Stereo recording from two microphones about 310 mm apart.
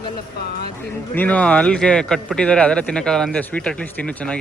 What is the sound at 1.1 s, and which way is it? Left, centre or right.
Speech, centre.